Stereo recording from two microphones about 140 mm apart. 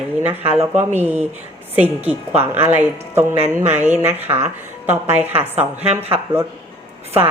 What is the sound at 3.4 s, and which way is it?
Speech, 55° right (ahead or behind).